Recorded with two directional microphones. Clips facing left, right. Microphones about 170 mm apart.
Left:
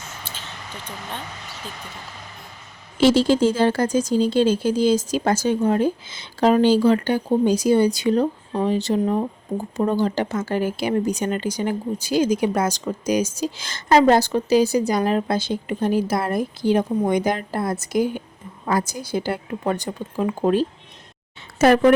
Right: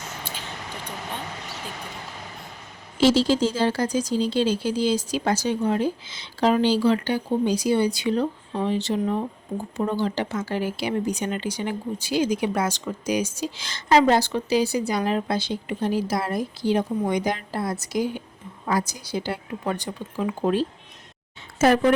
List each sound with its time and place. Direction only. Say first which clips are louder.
3.0 s speech: left 3 dB; 55° left (ahead or behind)
21.6 s a woman's voice: left 4 dB; 70° left (ahead or behind)